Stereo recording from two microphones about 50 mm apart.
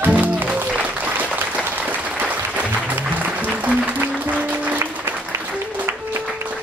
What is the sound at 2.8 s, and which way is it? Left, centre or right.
Music, right.